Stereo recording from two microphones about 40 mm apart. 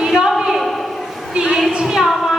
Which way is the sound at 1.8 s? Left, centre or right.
Centre.